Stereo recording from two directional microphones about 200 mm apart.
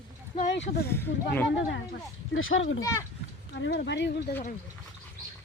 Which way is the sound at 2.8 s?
15° left (ahead or behind).